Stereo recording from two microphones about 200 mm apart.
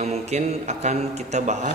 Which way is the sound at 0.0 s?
35° right (ahead or behind).